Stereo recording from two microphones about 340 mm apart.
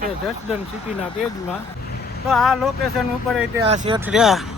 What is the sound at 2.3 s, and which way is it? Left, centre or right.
Speech, centre.